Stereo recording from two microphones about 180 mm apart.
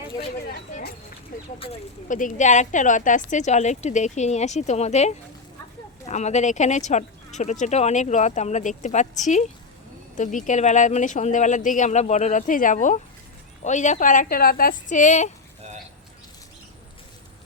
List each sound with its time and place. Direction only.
2.0 s speech: 45° left (ahead or behind)